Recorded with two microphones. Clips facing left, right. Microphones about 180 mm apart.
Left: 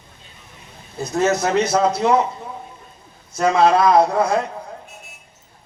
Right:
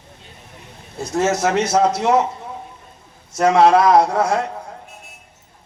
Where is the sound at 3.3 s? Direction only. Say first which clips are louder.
Right 2 dB; 80° right.